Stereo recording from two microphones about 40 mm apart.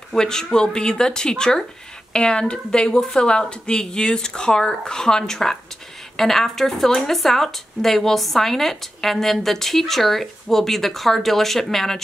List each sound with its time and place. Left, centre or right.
0.1 s speech: centre